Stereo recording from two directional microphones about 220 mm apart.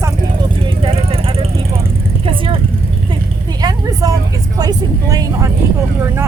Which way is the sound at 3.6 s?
15° right (ahead or behind).